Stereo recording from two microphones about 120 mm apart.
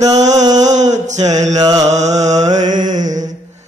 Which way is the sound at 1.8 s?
70° right (ahead or behind).